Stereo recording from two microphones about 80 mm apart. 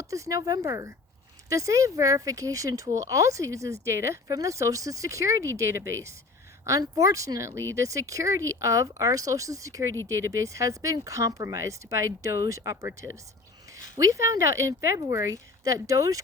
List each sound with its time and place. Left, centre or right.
0.0 s speech: right